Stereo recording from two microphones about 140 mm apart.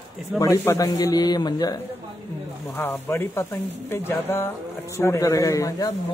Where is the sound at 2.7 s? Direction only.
15° left (ahead or behind).